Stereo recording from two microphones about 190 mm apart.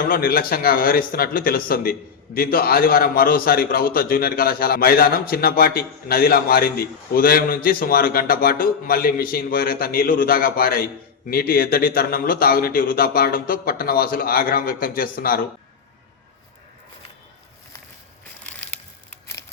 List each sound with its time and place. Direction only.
0.1 s speech: 50° left (ahead or behind)
18.4 s crushing: 5° left (ahead or behind)